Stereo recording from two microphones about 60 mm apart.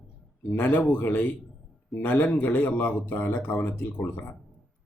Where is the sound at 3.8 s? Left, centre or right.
Left.